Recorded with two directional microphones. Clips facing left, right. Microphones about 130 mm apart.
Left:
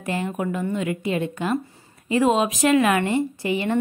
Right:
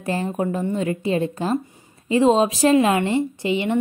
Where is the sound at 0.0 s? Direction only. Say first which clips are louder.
Right 2 dB; 30° right (ahead or behind).